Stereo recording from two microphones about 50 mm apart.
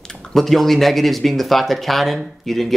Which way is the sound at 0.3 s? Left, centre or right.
Centre.